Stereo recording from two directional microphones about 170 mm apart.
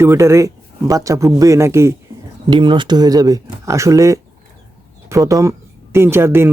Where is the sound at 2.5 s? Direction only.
25° right (ahead or behind).